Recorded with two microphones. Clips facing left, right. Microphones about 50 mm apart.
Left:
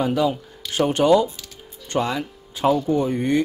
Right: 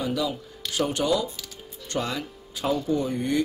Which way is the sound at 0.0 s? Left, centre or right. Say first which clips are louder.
Left 7 dB; left.